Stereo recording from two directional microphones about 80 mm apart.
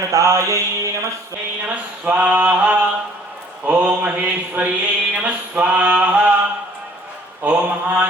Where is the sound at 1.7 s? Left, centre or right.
Centre.